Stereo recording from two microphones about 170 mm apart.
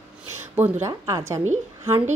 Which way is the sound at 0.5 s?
15° right (ahead or behind).